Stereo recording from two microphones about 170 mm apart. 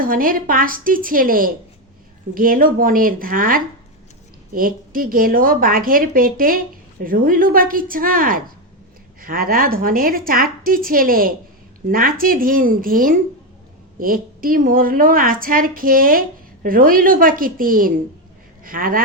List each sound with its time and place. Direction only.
0.0 s a woman's voice: 55° right (ahead or behind)